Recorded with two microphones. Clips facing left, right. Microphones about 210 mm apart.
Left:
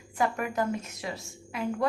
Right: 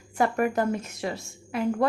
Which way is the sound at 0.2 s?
50° right (ahead or behind).